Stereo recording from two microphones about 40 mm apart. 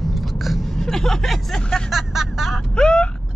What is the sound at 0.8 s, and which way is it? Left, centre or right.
Speech, centre.